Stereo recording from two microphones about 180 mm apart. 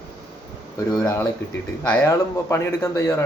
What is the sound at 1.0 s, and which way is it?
Speech, 15° left (ahead or behind).